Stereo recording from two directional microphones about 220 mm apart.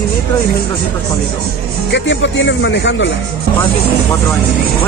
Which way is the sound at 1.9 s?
55° left (ahead or behind).